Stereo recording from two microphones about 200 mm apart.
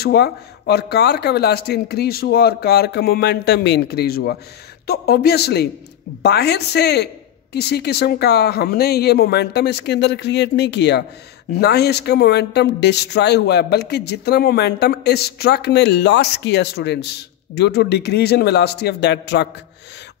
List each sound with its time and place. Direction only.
0.0 s speech: 50° left (ahead or behind)